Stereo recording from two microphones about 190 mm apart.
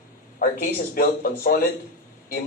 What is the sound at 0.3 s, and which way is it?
Speech, 50° left (ahead or behind).